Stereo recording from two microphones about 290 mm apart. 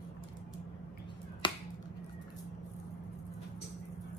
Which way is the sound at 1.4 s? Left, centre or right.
Centre.